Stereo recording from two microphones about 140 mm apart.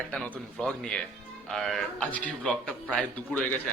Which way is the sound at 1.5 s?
Centre (ahead or behind).